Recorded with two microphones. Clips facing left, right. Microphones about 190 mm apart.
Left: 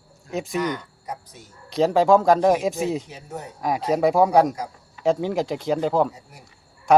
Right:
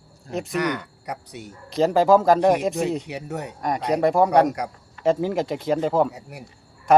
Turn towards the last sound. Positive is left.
turn(degrees=0)  # may be behind; listen again after turning